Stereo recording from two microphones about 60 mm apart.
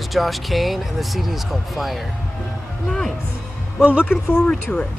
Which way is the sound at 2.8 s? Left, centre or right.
Centre.